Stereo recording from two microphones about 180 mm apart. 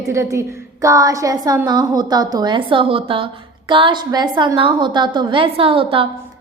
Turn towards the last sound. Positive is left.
turn(degrees=-30)  # may be behind; listen again after turning